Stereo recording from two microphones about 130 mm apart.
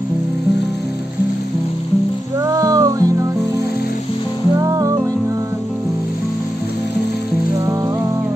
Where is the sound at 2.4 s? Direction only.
25° right (ahead or behind).